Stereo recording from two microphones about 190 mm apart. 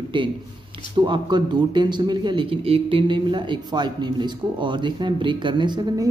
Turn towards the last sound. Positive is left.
turn(degrees=-25)  # may be behind; listen again after turning